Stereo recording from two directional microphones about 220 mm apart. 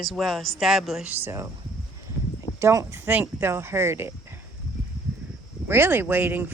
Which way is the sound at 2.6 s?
15° right (ahead or behind).